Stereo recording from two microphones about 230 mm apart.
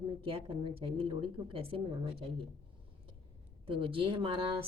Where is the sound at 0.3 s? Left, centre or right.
Right.